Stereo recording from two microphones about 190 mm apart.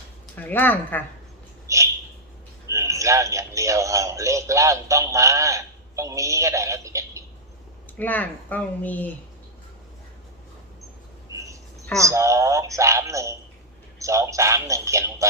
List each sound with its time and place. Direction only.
0.3 s speech: 10° left (ahead or behind)
1.6 s a sound: 15° right (ahead or behind)
2.6 s speech: 15° right (ahead or behind)
7.9 s speech: 10° left (ahead or behind)
11.3 s a sound: 15° right (ahead or behind)
12.0 s speech: 15° right (ahead or behind)